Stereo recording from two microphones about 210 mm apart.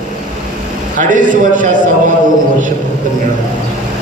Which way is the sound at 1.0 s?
40° right (ahead or behind).